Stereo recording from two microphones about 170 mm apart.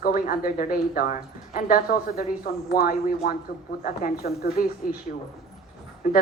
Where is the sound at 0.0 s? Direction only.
60° left (ahead or behind).